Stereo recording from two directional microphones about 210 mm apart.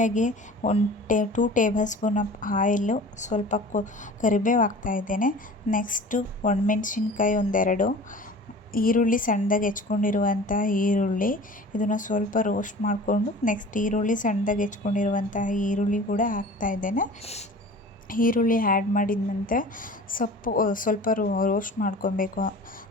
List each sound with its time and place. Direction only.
0.0 s a woman's voice: 35° left (ahead or behind)